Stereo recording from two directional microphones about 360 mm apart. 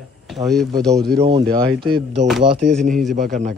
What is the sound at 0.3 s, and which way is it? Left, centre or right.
Speech, centre.